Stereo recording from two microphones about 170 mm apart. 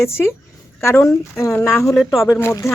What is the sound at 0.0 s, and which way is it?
Speech, 15° left (ahead or behind).